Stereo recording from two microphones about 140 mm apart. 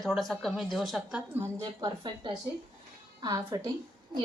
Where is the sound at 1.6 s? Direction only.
30° right (ahead or behind).